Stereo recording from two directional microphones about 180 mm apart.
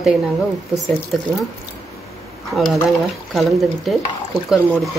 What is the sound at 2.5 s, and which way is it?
Speech, centre (ahead or behind).